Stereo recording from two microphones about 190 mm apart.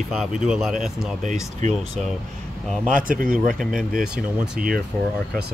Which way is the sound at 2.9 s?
45° right (ahead or behind).